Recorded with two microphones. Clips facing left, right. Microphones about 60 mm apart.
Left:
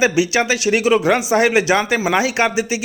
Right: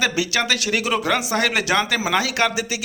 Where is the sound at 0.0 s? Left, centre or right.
Centre.